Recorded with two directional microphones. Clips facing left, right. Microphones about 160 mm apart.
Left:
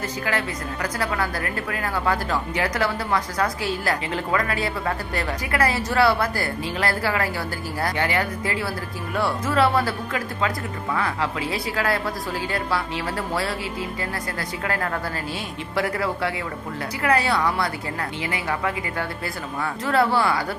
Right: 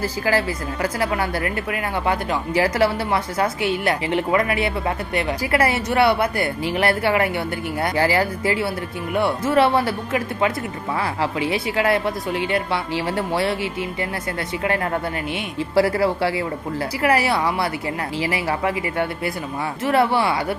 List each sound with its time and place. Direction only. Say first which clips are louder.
0.0 s a woman's voice: right 5 dB; 30° right (ahead or behind)